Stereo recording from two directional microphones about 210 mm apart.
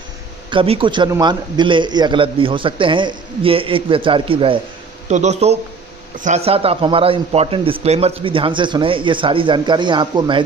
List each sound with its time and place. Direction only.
0.5 s speech: 25° right (ahead or behind)